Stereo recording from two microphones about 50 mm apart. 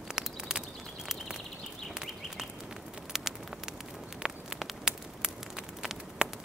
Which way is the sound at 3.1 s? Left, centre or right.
Centre.